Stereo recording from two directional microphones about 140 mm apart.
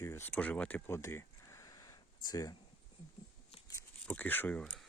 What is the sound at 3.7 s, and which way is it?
Speech, 15° left (ahead or behind).